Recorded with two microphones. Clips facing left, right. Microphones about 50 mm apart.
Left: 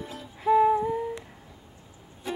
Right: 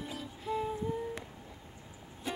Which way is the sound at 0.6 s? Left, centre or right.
Left.